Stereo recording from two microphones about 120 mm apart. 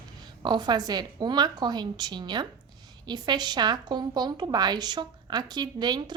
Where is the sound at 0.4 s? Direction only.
35° right (ahead or behind).